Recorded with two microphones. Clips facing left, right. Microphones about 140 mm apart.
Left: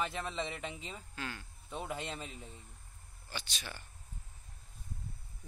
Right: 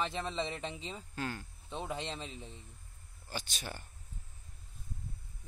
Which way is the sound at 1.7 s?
25° right (ahead or behind).